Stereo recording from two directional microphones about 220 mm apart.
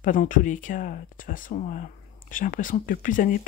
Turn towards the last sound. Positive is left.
turn(degrees=35)  # may be behind; listen again after turning